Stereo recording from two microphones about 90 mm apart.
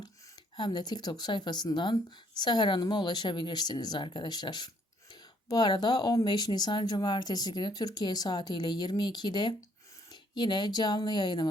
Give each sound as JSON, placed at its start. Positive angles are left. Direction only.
{"t": 0.5, "sound": "speech", "side_deg": 55}